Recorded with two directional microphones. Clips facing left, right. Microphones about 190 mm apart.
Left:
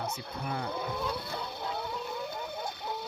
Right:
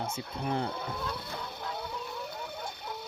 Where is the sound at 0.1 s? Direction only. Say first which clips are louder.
Right 3 dB; 30° right (ahead or behind).